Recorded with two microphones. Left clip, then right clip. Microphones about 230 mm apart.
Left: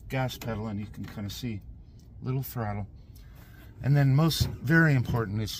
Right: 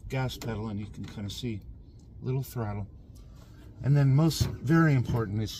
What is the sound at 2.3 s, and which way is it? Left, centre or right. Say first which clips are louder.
Speech: left 1 dB; centre.